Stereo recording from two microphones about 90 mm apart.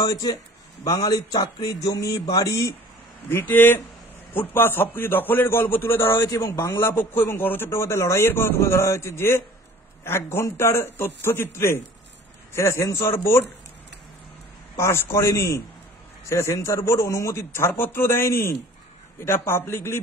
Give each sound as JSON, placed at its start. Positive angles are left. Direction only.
{"t": 0.0, "sound": "speech", "side_deg": 45}
{"t": 3.3, "sound": "a man's voice", "side_deg": 25}
{"t": 6.2, "sound": "speech", "side_deg": 45}
{"t": 6.8, "sound": "a man's voice", "side_deg": 25}
{"t": 14.8, "sound": "a man's voice", "side_deg": 30}